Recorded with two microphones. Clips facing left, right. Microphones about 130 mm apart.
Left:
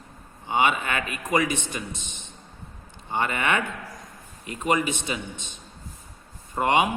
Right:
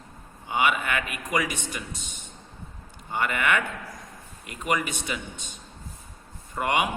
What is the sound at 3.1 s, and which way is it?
A man's voice, 25° left (ahead or behind).